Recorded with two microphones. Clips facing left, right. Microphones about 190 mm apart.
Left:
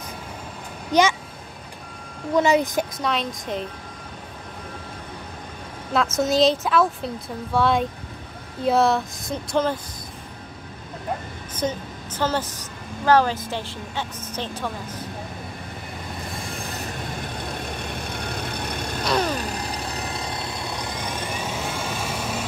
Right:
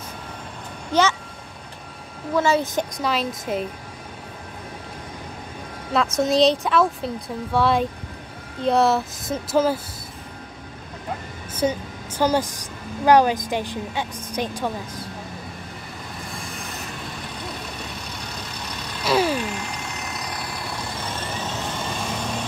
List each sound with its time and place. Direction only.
0.9 s speech: 15° left (ahead or behind)
2.3 s speech: 15° left (ahead or behind)
3.0 s speech: 5° right (ahead or behind)
5.9 s speech: centre (ahead or behind)
11.5 s a woman's voice: 10° right (ahead or behind)
18.2 s vehicle: 55° left (ahead or behind)
19.0 s vehicle: 5° right (ahead or behind)
19.3 s vehicle: 35° left (ahead or behind); by 21.9 s 10° left (ahead or behind)